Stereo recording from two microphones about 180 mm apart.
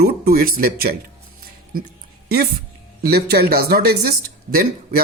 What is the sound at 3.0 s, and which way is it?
A man's voice, 60° right (ahead or behind).